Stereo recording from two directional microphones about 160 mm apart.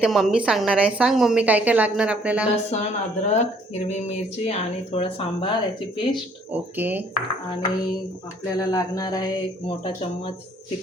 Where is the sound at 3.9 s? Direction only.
45° left (ahead or behind).